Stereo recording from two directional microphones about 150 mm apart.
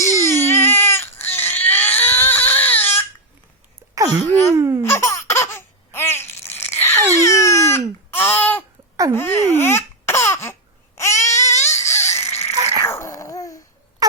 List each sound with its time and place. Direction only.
0.0 s baby cry: 20° left (ahead or behind)
3.9 s wail: 25° right (ahead or behind)
4.5 s speech: 20° right (ahead or behind)
4.8 s laughter: 15° left (ahead or behind)
11.6 s a sound: 20° left (ahead or behind)
14.0 s a sound: 25° right (ahead or behind)